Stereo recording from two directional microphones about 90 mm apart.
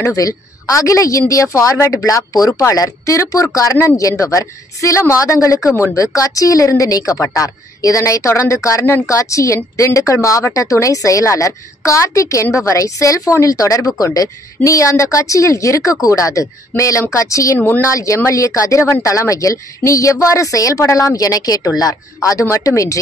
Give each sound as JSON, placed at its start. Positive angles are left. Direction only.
{"t": 0.0, "sound": "speech", "side_deg": 40}
{"t": 17.6, "sound": "speech", "side_deg": 20}
{"t": 17.8, "sound": "speech", "side_deg": 35}